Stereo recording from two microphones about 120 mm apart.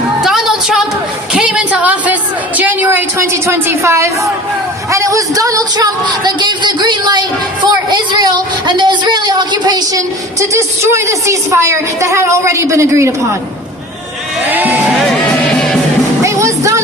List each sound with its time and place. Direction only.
0.2 s music: 5° right (ahead or behind)
1.3 s a sound: 10° right (ahead or behind)
2.6 s a woman's voice: 15° right (ahead or behind); by 10.0 s 35° right (ahead or behind)
10.5 s a woman's voice: 25° right (ahead or behind)
14.4 s speech: 15° right (ahead or behind)
15.5 s music: 5° left (ahead or behind)
16.2 s music: 25° right (ahead or behind)